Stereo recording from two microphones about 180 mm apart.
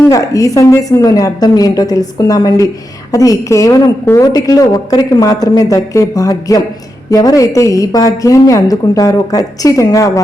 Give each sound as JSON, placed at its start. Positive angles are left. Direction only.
{"t": 0.0, "sound": "a woman's voice", "side_deg": 20}